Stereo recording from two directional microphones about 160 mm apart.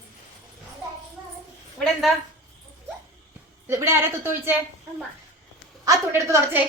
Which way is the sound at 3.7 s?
15° right (ahead or behind).